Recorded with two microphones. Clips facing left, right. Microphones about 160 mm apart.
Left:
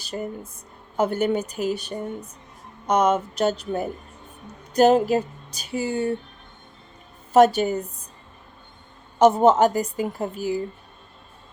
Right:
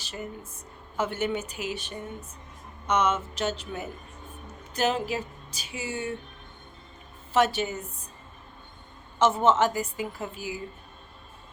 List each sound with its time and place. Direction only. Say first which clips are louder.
0.9 s a woman's voice: left 7 dB; 40° left (ahead or behind)
7.3 s a woman's voice: left 8 dB; 40° left (ahead or behind)
9.1 s a woman's voice: left 6 dB; 35° left (ahead or behind)